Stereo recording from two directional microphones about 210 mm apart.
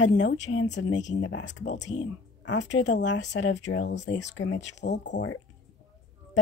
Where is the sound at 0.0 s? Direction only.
60° left (ahead or behind).